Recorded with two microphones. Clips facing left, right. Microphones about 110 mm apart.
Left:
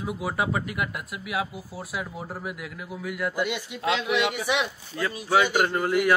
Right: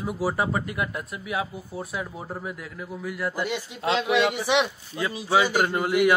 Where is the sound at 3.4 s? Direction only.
35° right (ahead or behind).